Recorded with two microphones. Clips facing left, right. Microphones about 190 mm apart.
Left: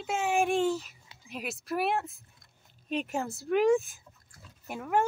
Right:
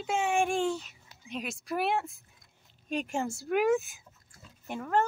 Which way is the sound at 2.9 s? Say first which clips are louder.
Even; centre (ahead or behind).